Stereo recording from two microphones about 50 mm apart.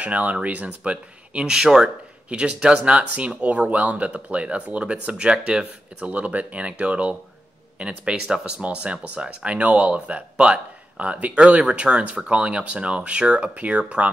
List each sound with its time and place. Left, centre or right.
0.0 s speech: right
1.4 s speech: centre
6.0 s speech: right